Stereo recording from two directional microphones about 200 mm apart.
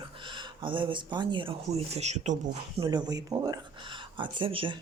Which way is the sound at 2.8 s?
20° right (ahead or behind).